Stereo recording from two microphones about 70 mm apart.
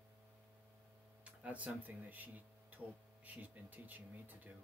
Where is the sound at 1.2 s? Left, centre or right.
Centre.